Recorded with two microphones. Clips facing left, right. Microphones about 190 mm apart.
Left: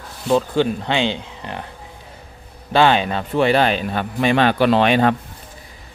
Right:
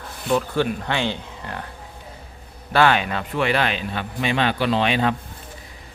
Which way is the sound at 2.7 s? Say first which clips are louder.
Left 3 dB; 25° left (ahead or behind).